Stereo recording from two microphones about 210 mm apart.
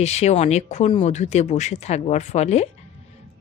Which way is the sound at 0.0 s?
30° left (ahead or behind).